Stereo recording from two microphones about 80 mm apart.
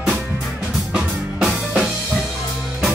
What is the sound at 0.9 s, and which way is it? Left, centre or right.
Music, centre.